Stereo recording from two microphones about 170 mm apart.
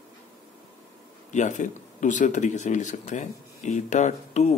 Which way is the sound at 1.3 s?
45° left (ahead or behind).